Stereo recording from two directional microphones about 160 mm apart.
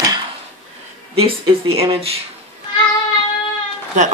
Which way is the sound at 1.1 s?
35° right (ahead or behind).